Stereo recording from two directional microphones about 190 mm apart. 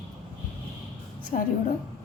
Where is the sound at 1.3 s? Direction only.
40° left (ahead or behind).